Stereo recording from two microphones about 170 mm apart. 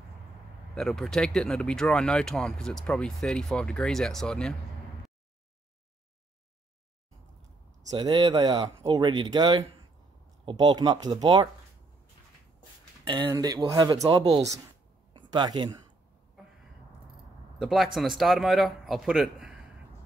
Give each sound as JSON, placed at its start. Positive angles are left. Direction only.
{"t": 0.7, "sound": "speech", "side_deg": 0}
{"t": 7.9, "sound": "speech", "side_deg": -25}
{"t": 13.3, "sound": "speech", "side_deg": -20}
{"t": 15.1, "sound": "speech", "side_deg": -25}
{"t": 17.6, "sound": "speech", "side_deg": 0}